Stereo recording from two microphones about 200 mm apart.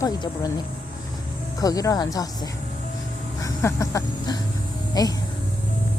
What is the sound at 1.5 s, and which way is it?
Speech, 15° left (ahead or behind).